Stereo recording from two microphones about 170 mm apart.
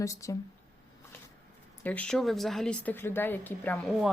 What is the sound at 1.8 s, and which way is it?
Speech, 10° left (ahead or behind).